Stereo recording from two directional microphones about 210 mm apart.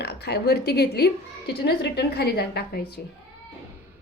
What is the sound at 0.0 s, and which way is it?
A woman's voice, 50° left (ahead or behind).